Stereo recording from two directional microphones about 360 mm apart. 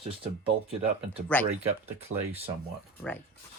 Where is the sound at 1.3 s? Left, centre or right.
Centre.